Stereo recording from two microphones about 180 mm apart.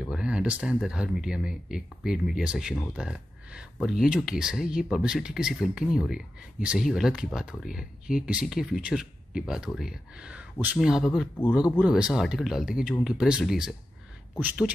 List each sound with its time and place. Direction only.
0.0 s speech: 5° right (ahead or behind)